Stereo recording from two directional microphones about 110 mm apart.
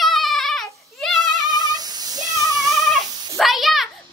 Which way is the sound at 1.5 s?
35° right (ahead or behind).